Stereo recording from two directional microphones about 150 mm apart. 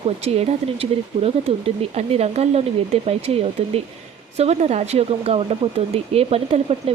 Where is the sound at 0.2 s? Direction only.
45° right (ahead or behind).